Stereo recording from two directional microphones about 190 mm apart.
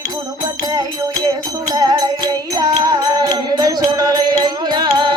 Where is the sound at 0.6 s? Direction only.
20° right (ahead or behind).